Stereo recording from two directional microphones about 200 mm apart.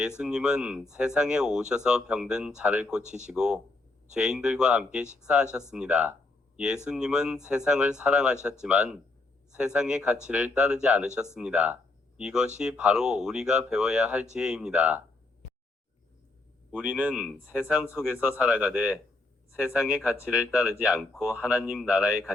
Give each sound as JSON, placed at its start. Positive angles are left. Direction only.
{"t": 0.2, "sound": "speech", "side_deg": -5}
{"t": 16.7, "sound": "speech", "side_deg": -5}